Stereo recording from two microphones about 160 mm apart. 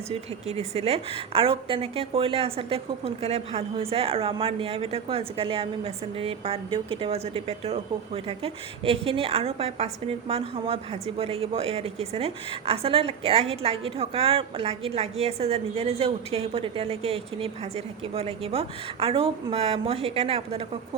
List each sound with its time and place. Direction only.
0.1 s a woman's voice: 40° right (ahead or behind)